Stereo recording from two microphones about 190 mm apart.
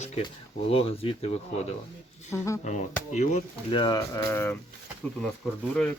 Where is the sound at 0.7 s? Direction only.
30° left (ahead or behind).